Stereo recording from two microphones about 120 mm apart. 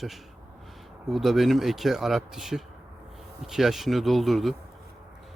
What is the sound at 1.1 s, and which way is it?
Speech, centre (ahead or behind).